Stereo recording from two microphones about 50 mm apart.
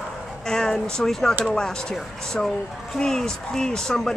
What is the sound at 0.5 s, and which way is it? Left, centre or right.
Speech, centre.